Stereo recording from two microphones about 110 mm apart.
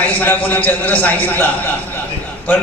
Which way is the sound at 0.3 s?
15° left (ahead or behind).